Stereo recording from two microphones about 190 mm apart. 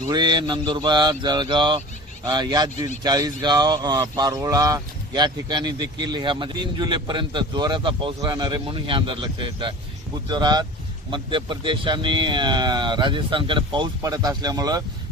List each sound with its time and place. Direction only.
0.1 s speech: 20° right (ahead or behind)